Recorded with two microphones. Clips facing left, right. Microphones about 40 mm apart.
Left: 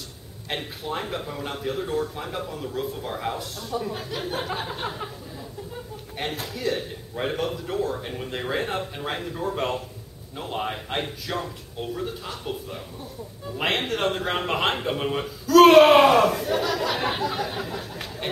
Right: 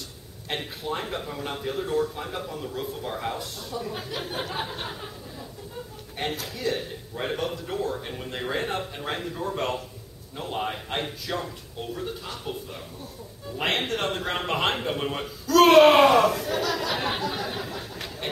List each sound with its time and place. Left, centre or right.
0.5 s a man's voice: centre
4.8 s speech: centre
6.4 s a man's voice: centre
17.2 s a sound: centre